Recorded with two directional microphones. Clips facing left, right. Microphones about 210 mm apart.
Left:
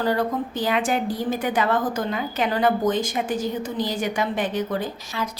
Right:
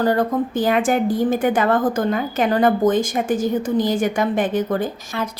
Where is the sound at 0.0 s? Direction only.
50° right (ahead or behind).